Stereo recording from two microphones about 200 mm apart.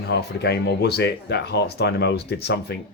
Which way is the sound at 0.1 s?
55° left (ahead or behind).